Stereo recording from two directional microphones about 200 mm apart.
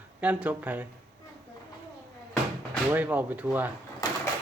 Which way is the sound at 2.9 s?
10° right (ahead or behind).